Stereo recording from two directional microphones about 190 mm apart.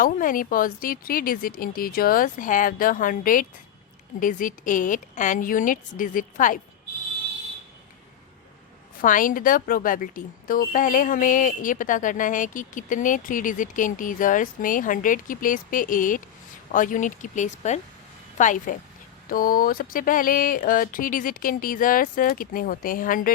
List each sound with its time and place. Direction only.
0.0 s speech: 45° left (ahead or behind)
9.0 s speech: 45° left (ahead or behind)